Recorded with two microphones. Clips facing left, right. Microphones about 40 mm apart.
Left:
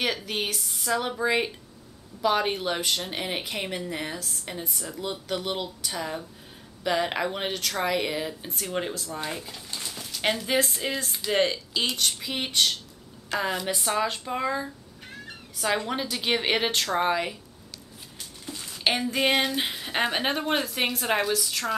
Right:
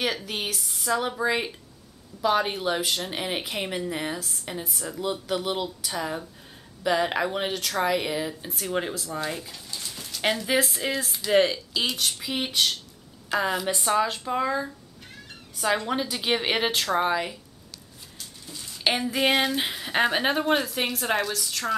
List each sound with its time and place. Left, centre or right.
0.0 s speech: centre
9.7 s a sound: left
9.9 s speech: centre
18.9 s speech: centre